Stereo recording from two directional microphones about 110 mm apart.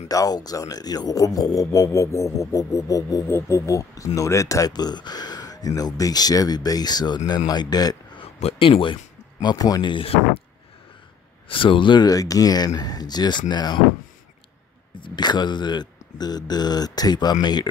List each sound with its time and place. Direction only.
0.1 s speech: 35° left (ahead or behind)
8.5 s speech: 55° left (ahead or behind)
9.4 s speech: 35° left (ahead or behind); by 10.2 s 55° left (ahead or behind)
11.4 s speech: 50° left (ahead or behind)
15.0 s speech: 45° left (ahead or behind)